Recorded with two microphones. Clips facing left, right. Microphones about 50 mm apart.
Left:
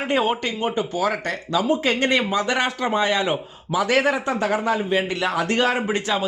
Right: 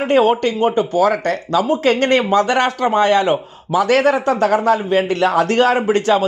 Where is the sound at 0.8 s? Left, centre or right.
Right.